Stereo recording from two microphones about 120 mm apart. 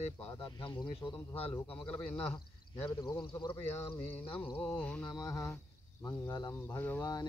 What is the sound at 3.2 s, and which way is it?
Speech, 40° left (ahead or behind).